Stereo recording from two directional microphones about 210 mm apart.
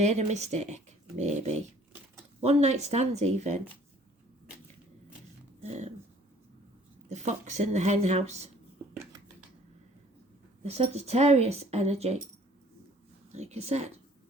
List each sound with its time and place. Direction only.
0.0 s a woman's voice: 35° right (ahead or behind)
5.6 s a woman's voice: 30° right (ahead or behind)
7.1 s a woman's voice: 35° right (ahead or behind)
10.6 s speech: 30° right (ahead or behind)
13.3 s a woman's voice: 30° right (ahead or behind)